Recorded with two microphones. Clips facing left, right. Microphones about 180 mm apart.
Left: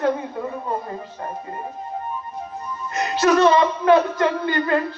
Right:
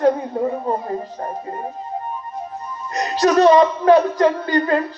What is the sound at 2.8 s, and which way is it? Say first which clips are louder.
Speech: right 1 dB; 35° right (ahead or behind).